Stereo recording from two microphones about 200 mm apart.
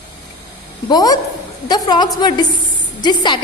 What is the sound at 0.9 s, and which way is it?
A woman's voice, 20° left (ahead or behind).